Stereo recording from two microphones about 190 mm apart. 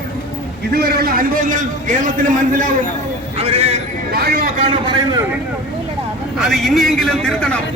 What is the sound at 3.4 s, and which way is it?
Speech, 30° right (ahead or behind).